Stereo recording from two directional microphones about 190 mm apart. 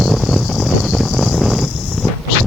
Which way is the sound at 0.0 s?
Centre (ahead or behind).